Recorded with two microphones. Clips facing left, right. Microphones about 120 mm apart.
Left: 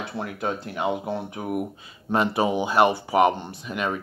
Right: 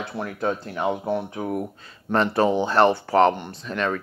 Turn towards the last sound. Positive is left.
turn(degrees=10)  # may be behind; listen again after turning